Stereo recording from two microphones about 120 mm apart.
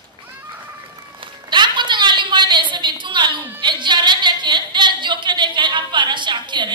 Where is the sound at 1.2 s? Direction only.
40° right (ahead or behind).